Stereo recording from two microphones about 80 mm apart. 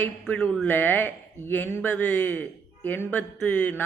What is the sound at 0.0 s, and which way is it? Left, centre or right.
A man's voice, left.